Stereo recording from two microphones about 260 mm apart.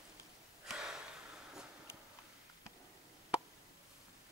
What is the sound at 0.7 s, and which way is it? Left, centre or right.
Gasp, centre.